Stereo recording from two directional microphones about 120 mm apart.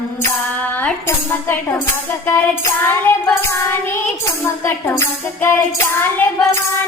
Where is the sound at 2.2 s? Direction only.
20° left (ahead or behind).